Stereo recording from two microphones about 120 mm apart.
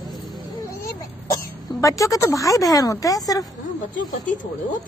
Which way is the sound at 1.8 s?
25° left (ahead or behind).